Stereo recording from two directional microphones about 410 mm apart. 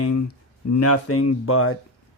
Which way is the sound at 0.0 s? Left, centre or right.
Left.